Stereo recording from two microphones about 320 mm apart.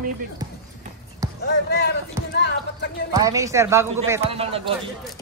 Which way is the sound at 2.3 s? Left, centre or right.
Left.